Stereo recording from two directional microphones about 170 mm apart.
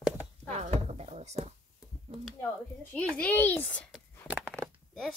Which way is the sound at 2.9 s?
10° left (ahead or behind).